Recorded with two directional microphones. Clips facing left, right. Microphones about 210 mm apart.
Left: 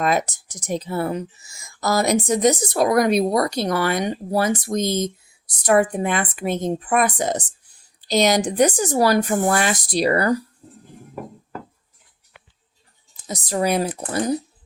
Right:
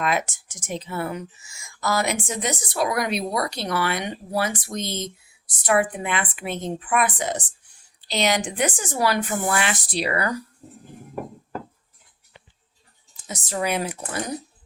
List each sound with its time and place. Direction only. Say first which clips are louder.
0.0 s speech: left 4 dB; 40° left (ahead or behind)
13.2 s speech: left 5 dB; 35° left (ahead or behind)